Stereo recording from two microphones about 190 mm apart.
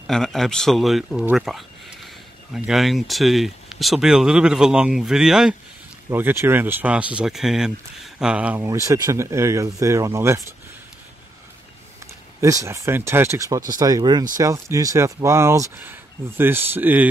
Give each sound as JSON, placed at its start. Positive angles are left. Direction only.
{"t": 0.0, "sound": "speech", "side_deg": 0}
{"t": 12.4, "sound": "speech", "side_deg": -15}